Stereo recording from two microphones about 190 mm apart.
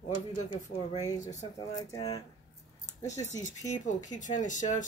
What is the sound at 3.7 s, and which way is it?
Speech, 40° left (ahead or behind).